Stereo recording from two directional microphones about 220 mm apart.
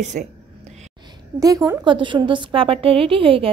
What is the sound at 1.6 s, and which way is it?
A woman's voice, 20° right (ahead or behind).